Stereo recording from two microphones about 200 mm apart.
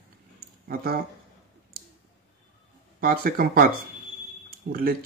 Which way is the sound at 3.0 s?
45° right (ahead or behind).